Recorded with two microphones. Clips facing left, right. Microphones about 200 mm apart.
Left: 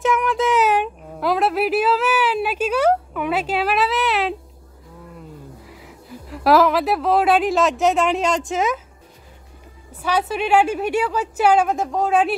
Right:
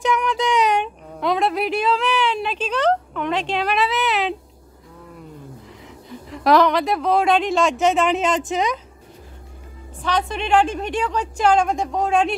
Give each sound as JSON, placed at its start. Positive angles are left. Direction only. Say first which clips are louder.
{"t": 0.0, "sound": "speech", "louder": "left 2 dB", "side_deg": 0}
{"t": 6.0, "sound": "a woman's voice", "louder": "left 1 dB", "side_deg": 5}
{"t": 10.0, "sound": "a woman's voice", "louder": "left 2 dB", "side_deg": 5}